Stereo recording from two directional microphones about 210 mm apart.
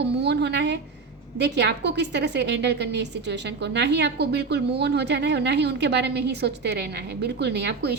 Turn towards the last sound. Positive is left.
turn(degrees=-55)  # may be behind; listen again after turning